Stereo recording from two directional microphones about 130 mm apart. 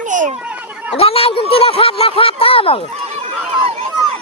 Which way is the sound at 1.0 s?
50° left (ahead or behind).